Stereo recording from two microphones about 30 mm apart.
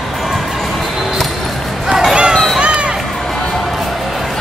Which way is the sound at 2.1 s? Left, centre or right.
Right.